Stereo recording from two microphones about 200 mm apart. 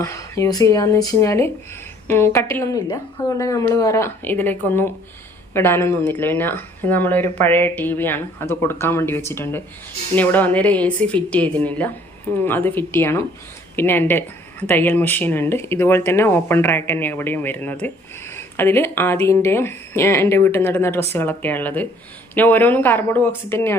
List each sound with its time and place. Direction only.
0.0 s speech: 15° left (ahead or behind)